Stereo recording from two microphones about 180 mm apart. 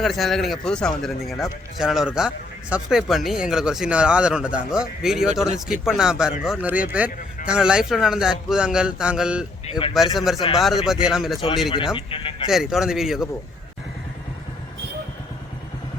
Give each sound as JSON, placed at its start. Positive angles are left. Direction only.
{"t": 0.0, "sound": "speech", "side_deg": 0}
{"t": 11.9, "sound": "speech", "side_deg": 30}
{"t": 12.5, "sound": "speech", "side_deg": 0}